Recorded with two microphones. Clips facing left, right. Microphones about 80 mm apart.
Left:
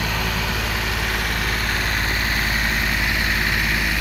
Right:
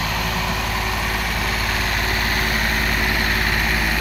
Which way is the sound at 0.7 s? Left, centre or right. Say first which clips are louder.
Right 1 dB; left.